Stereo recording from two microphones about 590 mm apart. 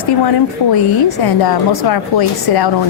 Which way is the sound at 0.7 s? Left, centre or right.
Left.